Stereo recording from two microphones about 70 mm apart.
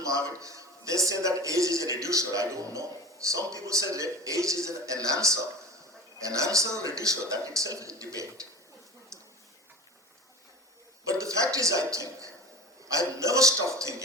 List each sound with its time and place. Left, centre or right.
0.0 s a man's voice: right
11.1 s a man's voice: right